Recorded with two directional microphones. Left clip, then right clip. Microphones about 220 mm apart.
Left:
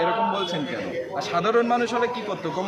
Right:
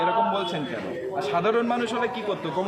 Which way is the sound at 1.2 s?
Centre (ahead or behind).